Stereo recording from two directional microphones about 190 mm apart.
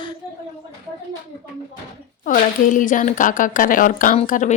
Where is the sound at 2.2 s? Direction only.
45° left (ahead or behind).